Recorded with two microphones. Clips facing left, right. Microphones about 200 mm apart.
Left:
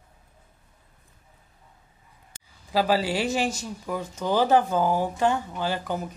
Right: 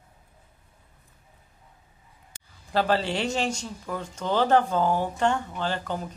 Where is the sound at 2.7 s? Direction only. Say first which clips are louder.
Left 1 dB; 5° left (ahead or behind).